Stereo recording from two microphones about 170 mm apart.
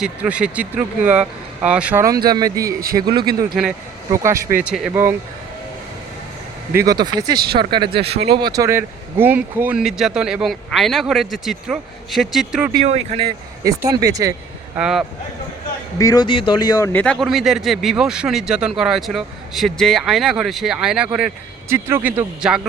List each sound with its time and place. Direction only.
0.0 s speech: 5° right (ahead or behind)
2.2 s speech: 25° right (ahead or behind)
2.6 s a man's voice: 60° right (ahead or behind)
3.1 s speech: 25° right (ahead or behind)
3.5 s speech: centre (ahead or behind)
4.1 s speech: 15° right (ahead or behind)
4.6 s speech: 5° right (ahead or behind)
6.7 s speech: 25° right (ahead or behind); by 12.7 s 5° right (ahead or behind)
12.8 s speech: 40° right (ahead or behind)
13.8 s speech: 20° right (ahead or behind)
14.8 s speech: 5° right (ahead or behind)
16.0 s speech: 20° left (ahead or behind)
16.9 s speech: 5° left (ahead or behind)